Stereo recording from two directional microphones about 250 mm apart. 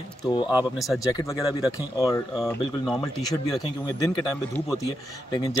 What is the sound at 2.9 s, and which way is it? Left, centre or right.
Speech, centre.